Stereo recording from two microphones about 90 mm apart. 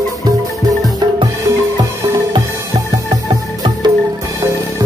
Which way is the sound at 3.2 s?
65° right (ahead or behind).